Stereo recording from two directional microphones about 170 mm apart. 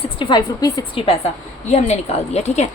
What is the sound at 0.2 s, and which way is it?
Speech, 25° left (ahead or behind).